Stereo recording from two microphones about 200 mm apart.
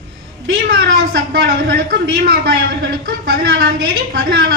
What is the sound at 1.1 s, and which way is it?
A man's voice, 50° right (ahead or behind).